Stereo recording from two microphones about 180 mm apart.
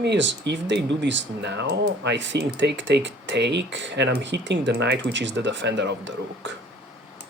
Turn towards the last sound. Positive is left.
turn(degrees=-80)